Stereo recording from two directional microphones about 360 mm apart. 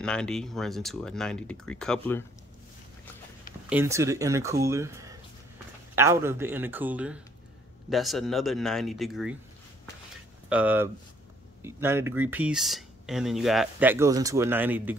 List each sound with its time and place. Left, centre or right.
0.0 s speech: centre
3.6 s speech: centre
10.5 s speech: centre